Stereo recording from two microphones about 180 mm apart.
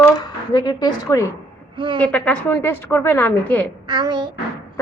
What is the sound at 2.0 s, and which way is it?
A woman's voice, 10° left (ahead or behind).